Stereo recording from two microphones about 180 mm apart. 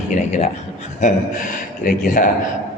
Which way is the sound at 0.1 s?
45° left (ahead or behind).